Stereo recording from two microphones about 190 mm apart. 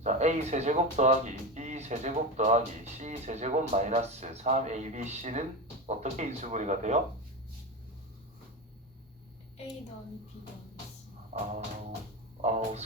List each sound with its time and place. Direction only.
0.0 s speech: 35° right (ahead or behind)
11.3 s music: 35° right (ahead or behind)
12.4 s speech: 35° right (ahead or behind)